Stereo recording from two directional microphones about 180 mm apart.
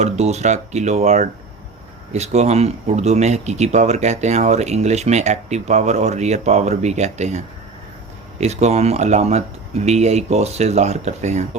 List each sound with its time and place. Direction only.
0.0 s speech: 40° right (ahead or behind)